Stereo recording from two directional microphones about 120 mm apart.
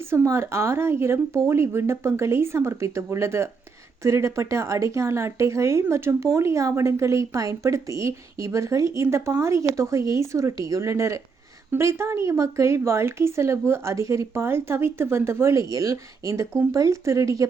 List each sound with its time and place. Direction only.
0.0 s speech: 20° right (ahead or behind)